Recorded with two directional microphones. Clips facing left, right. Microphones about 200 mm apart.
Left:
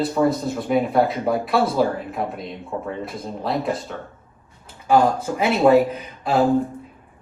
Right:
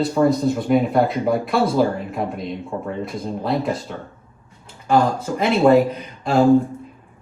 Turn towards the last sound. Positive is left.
turn(degrees=5)  # may be behind; listen again after turning